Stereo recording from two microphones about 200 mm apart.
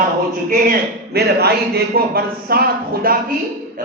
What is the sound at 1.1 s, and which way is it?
A man's voice, 50° right (ahead or behind).